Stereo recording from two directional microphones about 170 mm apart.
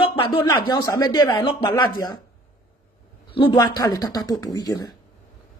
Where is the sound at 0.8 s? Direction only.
20° left (ahead or behind).